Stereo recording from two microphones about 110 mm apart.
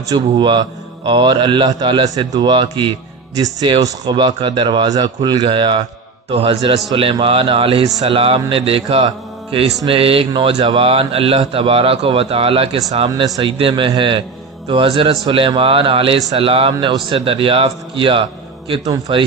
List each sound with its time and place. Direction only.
0.1 s speech: 45° right (ahead or behind)
6.3 s speech: 60° right (ahead or behind)
13.1 s speech: 35° right (ahead or behind)
13.4 s speech: 50° right (ahead or behind)